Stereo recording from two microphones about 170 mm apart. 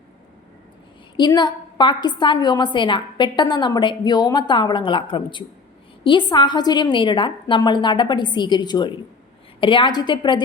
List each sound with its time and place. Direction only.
1.1 s a woman's voice: 25° left (ahead or behind)